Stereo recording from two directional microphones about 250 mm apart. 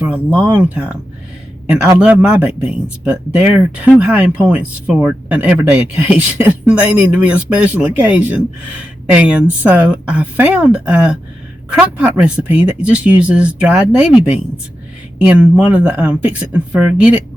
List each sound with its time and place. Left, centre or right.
0.5 s speech: centre